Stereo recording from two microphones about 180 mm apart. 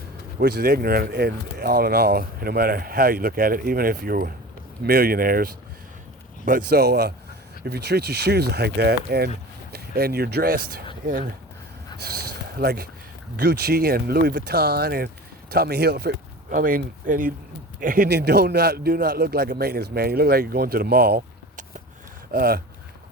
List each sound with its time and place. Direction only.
0.3 s speech: 60° right (ahead or behind)
11.9 s a sound: 60° right (ahead or behind)
13.3 s speech: 55° right (ahead or behind)